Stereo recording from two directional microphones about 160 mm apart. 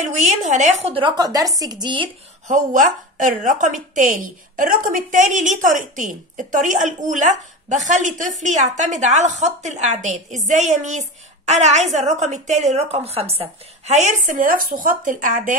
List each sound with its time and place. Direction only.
0.0 s a woman's voice: 50° right (ahead or behind); by 2.0 s 30° right (ahead or behind)
2.4 s a woman's voice: 55° right (ahead or behind)